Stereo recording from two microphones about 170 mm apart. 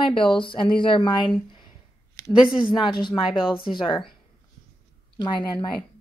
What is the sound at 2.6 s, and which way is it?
Speech, 30° left (ahead or behind).